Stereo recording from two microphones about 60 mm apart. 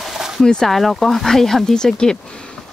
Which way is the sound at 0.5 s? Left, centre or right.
Centre.